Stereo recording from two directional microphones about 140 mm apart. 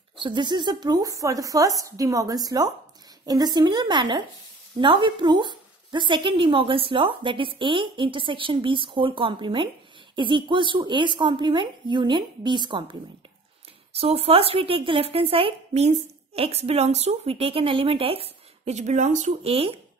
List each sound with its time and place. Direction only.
0.2 s a woman's voice: 35° right (ahead or behind)
13.9 s speech: 45° right (ahead or behind)